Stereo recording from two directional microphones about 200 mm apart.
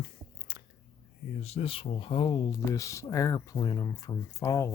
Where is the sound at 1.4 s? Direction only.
30° left (ahead or behind).